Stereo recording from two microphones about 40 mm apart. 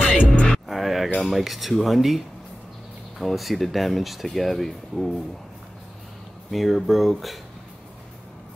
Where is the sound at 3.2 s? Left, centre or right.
Centre.